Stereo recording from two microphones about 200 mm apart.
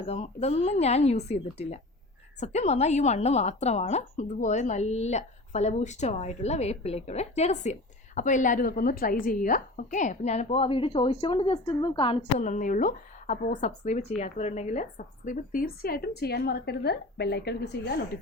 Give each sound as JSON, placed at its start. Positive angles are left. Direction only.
{"t": 0.0, "sound": "a woman's voice", "side_deg": 30}